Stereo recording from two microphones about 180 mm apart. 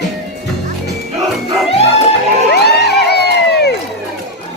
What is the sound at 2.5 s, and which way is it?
Crowd, 65° left (ahead or behind).